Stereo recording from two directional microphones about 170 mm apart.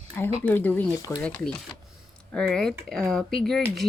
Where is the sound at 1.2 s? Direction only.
5° left (ahead or behind).